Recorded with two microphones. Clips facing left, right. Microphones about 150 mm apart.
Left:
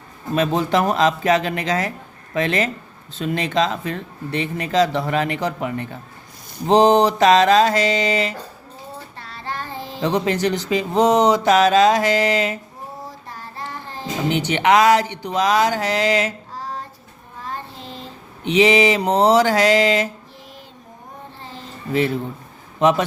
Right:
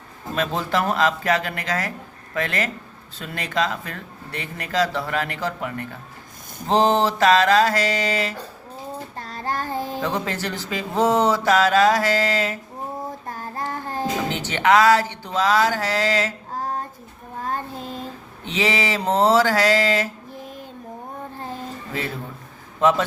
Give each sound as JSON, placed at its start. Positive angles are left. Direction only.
{"t": 0.3, "sound": "speech", "side_deg": 20}
{"t": 9.1, "sound": "child singing", "side_deg": -45}
{"t": 10.0, "sound": "speech", "side_deg": 20}
{"t": 13.1, "sound": "child singing", "side_deg": -50}
{"t": 14.3, "sound": "speech", "side_deg": 15}
{"t": 16.6, "sound": "a sound", "side_deg": -50}
{"t": 17.4, "sound": "child singing", "side_deg": -45}
{"t": 18.4, "sound": "speech", "side_deg": 20}
{"t": 22.8, "sound": "speech", "side_deg": 20}